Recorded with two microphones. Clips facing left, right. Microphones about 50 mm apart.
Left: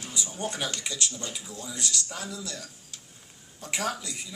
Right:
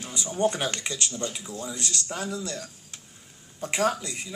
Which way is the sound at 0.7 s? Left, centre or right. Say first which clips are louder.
Right 2 dB; right.